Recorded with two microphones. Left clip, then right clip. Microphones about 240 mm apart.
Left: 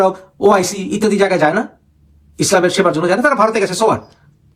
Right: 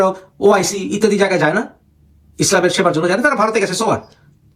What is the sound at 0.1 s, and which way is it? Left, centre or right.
A man's voice, centre.